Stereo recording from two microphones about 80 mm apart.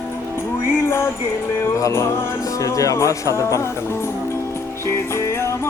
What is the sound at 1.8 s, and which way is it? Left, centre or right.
Speech, left.